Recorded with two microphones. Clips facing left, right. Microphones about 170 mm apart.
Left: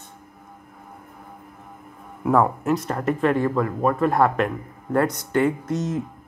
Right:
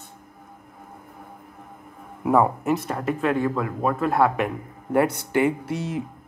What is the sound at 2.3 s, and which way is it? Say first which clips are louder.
Speech: even; 5° right (ahead or behind).